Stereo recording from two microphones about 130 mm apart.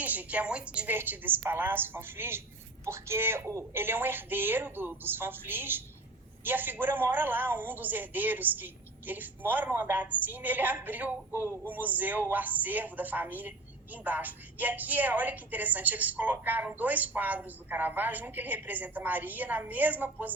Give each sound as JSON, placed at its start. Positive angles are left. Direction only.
{"t": 0.0, "sound": "a woman's voice", "side_deg": -10}